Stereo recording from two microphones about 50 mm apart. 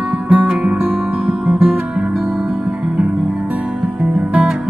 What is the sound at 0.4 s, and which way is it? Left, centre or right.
Music, right.